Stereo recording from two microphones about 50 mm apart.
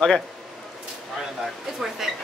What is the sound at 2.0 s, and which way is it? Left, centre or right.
Speech, centre.